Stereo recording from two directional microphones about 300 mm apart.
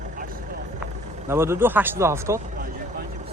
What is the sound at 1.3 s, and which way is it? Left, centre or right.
Speech, centre.